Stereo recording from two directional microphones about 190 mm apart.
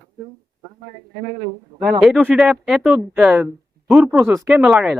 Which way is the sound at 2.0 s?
Centre (ahead or behind).